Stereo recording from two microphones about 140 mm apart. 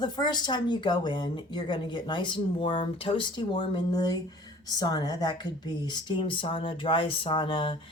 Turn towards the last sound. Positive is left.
turn(degrees=35)  # may be behind; listen again after turning